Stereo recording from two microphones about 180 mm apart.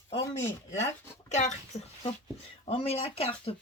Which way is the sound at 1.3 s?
40° left (ahead or behind).